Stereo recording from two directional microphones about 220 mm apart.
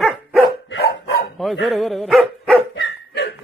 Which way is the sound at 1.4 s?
Centre (ahead or behind).